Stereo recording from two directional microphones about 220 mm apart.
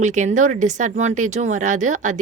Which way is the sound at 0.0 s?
35° right (ahead or behind).